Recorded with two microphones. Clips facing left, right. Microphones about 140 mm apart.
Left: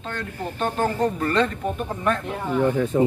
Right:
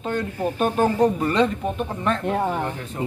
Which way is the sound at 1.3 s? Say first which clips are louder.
Right 2 dB; centre (ahead or behind).